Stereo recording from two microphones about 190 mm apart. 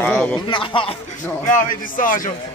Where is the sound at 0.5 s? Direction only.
25° left (ahead or behind).